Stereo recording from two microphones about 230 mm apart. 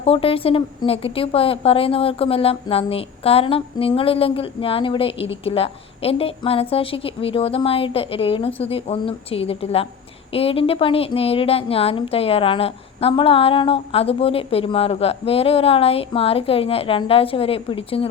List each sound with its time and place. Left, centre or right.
0.0 s a woman's voice: left